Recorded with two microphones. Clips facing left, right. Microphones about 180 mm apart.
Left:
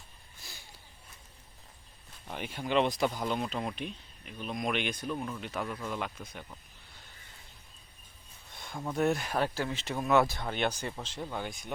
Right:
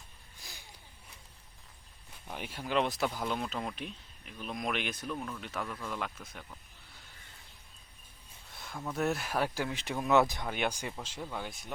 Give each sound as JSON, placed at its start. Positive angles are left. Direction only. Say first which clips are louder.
{"t": 0.4, "sound": "a sound", "louder": "even", "side_deg": -15}
{"t": 2.2, "sound": "speech", "louder": "left 3 dB", "side_deg": 0}
{"t": 5.1, "sound": "speech", "louder": "left 3 dB", "side_deg": 10}
{"t": 8.5, "sound": "a sound", "louder": "left 2 dB", "side_deg": -5}
{"t": 9.0, "sound": "speech", "louder": "left 3 dB", "side_deg": 0}
{"t": 11.2, "sound": "speech", "louder": "left 3 dB", "side_deg": 0}